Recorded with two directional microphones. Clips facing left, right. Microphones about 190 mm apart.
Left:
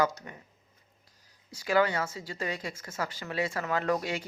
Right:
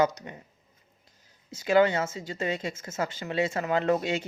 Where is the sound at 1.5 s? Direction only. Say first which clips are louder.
Right 4 dB; 25° right (ahead or behind).